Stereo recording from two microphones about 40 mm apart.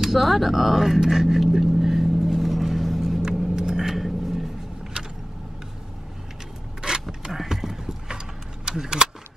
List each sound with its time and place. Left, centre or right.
0.0 s vehicle: centre
3.0 s vehicle: centre
6.8 s a sound: centre
8.6 s speech: centre